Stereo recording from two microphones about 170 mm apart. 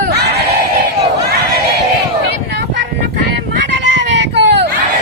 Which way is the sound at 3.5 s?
90° right.